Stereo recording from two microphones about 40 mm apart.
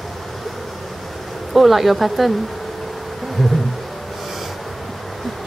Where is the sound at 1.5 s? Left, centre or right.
Centre.